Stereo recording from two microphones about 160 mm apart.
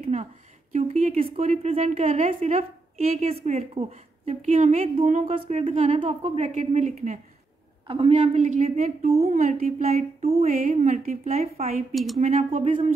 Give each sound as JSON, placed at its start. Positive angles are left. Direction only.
{"t": 0.0, "sound": "a sound", "side_deg": -45}
{"t": 0.7, "sound": "a woman's voice", "side_deg": -40}
{"t": 5.5, "sound": "a woman's voice", "side_deg": -40}
{"t": 7.8, "sound": "a woman's voice", "side_deg": -35}
{"t": 9.8, "sound": "a woman's voice", "side_deg": -40}
{"t": 10.6, "sound": "a woman's voice", "side_deg": -50}
{"t": 11.3, "sound": "a woman's voice", "side_deg": -40}
{"t": 11.9, "sound": "a woman's voice", "side_deg": 0}
{"t": 12.2, "sound": "a woman's voice", "side_deg": -50}
{"t": 12.6, "sound": "a woman's voice", "side_deg": -40}